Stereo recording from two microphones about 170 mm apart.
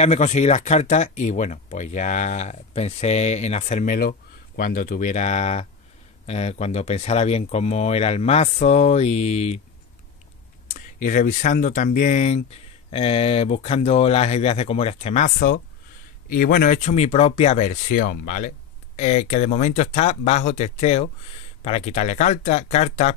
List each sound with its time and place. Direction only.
0.0 s speech: 40° left (ahead or behind)
10.7 s speech: 50° left (ahead or behind)